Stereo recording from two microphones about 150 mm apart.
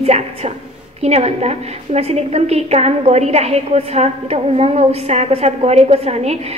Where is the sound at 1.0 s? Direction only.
45° right (ahead or behind).